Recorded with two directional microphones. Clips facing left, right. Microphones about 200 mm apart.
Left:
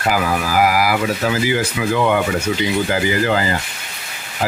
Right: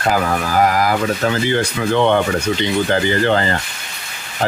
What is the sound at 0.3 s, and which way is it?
Speech, 5° left (ahead or behind).